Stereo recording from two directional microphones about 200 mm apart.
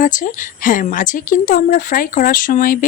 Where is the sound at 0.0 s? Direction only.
40° left (ahead or behind).